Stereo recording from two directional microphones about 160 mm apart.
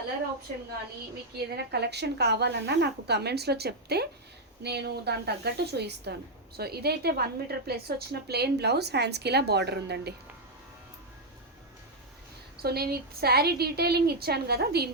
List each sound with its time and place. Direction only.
1.4 s a woman's voice: 90° right
12.6 s a woman's voice: 75° right (ahead or behind)